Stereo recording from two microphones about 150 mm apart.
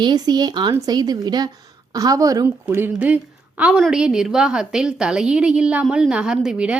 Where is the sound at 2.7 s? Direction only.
15° right (ahead or behind).